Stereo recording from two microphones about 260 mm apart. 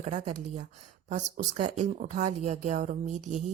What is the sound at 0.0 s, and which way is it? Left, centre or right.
Speech, right.